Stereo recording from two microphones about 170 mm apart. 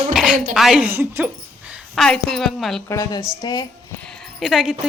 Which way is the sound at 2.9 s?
20° left (ahead or behind).